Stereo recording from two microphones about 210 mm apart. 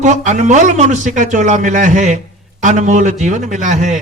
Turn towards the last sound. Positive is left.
turn(degrees=-35)  # may be behind; listen again after turning